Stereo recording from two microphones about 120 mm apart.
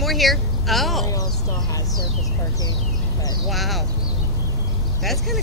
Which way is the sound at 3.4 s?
Centre (ahead or behind).